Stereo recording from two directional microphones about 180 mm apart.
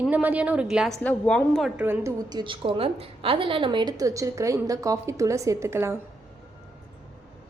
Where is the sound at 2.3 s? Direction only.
25° right (ahead or behind).